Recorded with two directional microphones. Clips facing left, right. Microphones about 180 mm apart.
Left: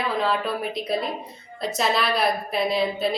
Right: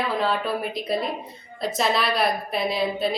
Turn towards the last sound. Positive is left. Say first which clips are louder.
# left 1 dB
turn(degrees=0)  # may be behind; listen again after turning